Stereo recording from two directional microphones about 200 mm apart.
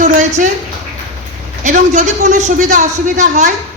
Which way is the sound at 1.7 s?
40° right (ahead or behind).